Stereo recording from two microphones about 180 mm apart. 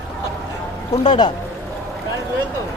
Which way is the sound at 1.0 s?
25° left (ahead or behind).